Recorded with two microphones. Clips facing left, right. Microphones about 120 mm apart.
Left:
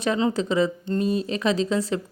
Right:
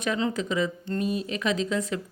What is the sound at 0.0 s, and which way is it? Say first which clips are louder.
Speech: left 4 dB; 30° left (ahead or behind).